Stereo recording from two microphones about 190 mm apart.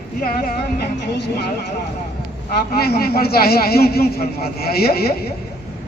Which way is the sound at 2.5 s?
55° left (ahead or behind).